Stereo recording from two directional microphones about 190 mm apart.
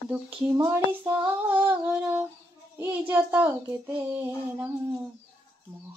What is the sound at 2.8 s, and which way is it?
Speech, 10° right (ahead or behind).